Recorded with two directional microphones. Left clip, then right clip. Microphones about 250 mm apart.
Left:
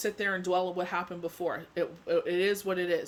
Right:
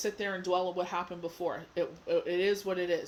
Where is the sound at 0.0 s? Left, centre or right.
Centre.